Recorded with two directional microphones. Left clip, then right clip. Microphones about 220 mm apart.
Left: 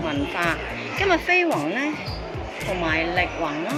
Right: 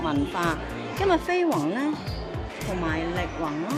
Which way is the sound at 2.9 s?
10° right (ahead or behind).